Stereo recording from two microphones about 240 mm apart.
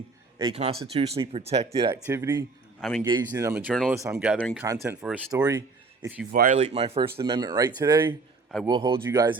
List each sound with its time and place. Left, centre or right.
0.3 s speech: right
2.0 s speech: centre
4.4 s speech: centre
4.6 s speech: centre
6.3 s speech: right; by 9.4 s centre